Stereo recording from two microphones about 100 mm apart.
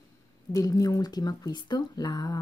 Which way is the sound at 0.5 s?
35° left (ahead or behind).